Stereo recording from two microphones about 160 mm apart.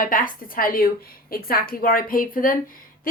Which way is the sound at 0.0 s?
60° left (ahead or behind).